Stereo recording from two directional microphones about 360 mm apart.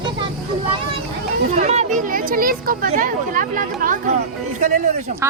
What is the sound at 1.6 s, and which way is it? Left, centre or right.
Speech, centre.